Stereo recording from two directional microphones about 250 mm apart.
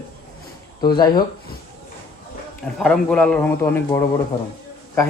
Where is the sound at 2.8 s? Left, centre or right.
Centre.